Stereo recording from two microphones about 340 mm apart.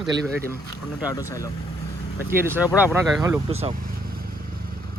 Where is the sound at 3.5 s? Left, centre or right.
Centre.